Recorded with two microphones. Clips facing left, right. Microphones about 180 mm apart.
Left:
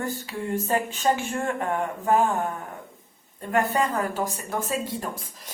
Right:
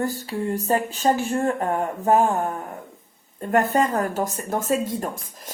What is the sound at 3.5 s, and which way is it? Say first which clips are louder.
Speech: right 4 dB; 45° right (ahead or behind).